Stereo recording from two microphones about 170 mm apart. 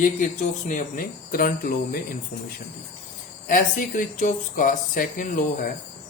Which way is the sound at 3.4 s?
50° left (ahead or behind).